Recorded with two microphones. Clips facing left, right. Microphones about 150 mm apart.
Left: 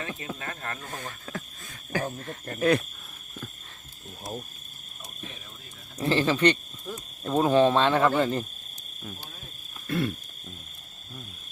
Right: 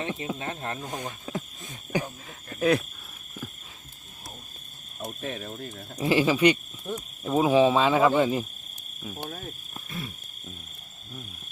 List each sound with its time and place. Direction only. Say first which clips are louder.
0.0 s speech: right 4 dB; 20° right (ahead or behind)
2.6 s speech: even; centre (ahead or behind)
4.9 s speech: right 11 dB; 65° right (ahead or behind)
6.0 s speech: right 2 dB; 10° right (ahead or behind)
9.8 s owl: left 11 dB; 65° left (ahead or behind)